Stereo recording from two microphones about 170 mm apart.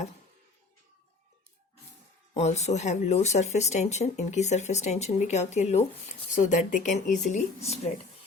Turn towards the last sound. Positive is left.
turn(degrees=40)  # may be behind; listen again after turning